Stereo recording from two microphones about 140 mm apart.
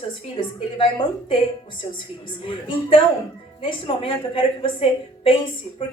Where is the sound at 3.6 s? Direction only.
40° left (ahead or behind).